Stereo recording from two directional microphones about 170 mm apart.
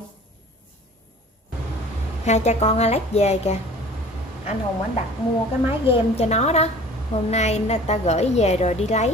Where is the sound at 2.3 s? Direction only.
40° left (ahead or behind).